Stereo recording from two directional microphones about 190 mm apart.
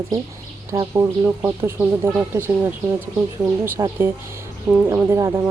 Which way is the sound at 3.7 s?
15° right (ahead or behind).